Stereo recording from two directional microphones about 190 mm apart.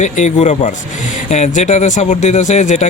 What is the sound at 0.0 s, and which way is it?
Speech, 40° left (ahead or behind).